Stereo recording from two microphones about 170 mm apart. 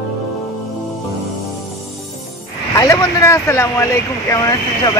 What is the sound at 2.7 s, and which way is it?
Speech, 20° left (ahead or behind).